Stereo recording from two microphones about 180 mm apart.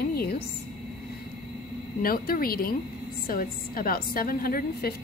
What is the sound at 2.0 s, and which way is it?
Speech, 55° left (ahead or behind).